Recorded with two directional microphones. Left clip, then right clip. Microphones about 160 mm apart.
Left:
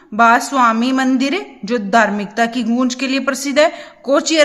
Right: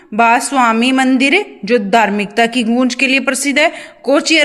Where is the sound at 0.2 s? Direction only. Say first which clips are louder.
Right 1 dB; 15° right (ahead or behind).